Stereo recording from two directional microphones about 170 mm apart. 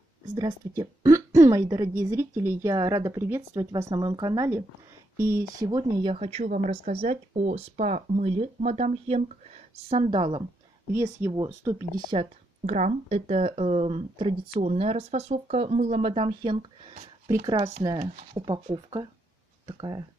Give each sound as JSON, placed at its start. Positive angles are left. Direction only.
{"t": 0.4, "sound": "a woman's voice", "side_deg": -20}
{"t": 6.1, "sound": "speech", "side_deg": -40}
{"t": 10.9, "sound": "a woman's voice", "side_deg": -15}
{"t": 12.1, "sound": "speech", "side_deg": -35}